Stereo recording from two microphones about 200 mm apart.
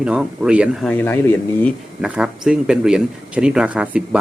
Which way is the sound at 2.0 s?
5° right (ahead or behind).